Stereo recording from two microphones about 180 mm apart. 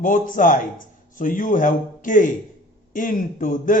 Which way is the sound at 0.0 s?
50° left (ahead or behind).